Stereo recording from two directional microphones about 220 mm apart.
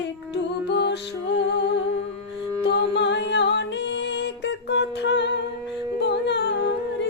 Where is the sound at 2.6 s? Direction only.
55° left (ahead or behind).